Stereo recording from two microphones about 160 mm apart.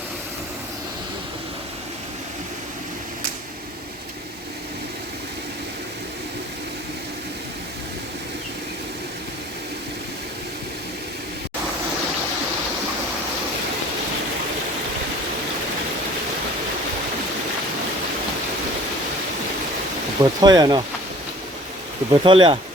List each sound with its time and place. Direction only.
20.2 s speech: 25° right (ahead or behind)
22.1 s speech: 30° right (ahead or behind)